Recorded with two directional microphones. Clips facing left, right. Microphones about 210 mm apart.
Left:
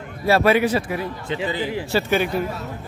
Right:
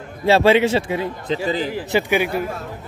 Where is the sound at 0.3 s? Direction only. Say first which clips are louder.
Right 3 dB; 25° right (ahead or behind).